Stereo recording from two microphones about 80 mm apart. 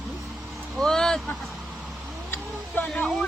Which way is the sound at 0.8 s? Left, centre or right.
Centre.